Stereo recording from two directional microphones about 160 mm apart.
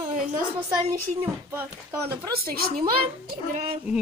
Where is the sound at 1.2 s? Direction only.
10° right (ahead or behind).